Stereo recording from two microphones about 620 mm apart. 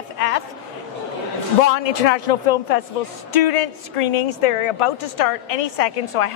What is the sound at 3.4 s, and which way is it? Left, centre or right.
A woman's voice, left.